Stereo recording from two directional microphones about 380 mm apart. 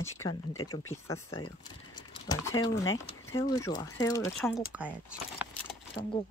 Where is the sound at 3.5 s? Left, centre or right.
Centre.